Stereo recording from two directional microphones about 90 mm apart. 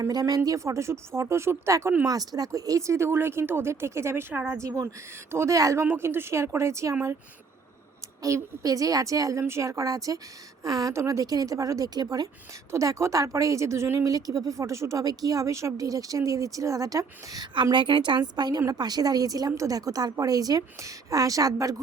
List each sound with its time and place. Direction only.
0.0 s speech: 45° right (ahead or behind)
2.0 s speech: 45° right (ahead or behind)
5.8 s speech: 25° right (ahead or behind)
8.2 s speech: 35° right (ahead or behind)
12.7 s speech: 35° right (ahead or behind)
17.5 s a woman's voice: 60° right (ahead or behind); by 21.8 s 40° right (ahead or behind)